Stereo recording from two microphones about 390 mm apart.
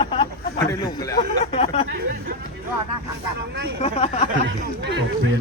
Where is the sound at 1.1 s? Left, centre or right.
Centre.